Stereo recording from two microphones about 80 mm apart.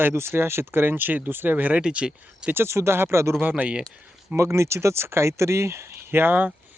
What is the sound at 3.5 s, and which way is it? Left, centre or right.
Speech, centre.